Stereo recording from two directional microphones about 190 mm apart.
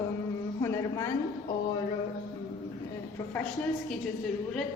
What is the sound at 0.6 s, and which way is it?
Speech, 15° left (ahead or behind).